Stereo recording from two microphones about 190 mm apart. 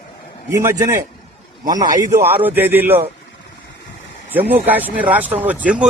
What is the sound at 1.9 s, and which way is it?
Speech, 20° right (ahead or behind).